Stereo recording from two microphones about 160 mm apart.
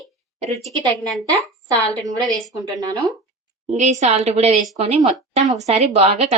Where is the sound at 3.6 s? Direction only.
45° right (ahead or behind).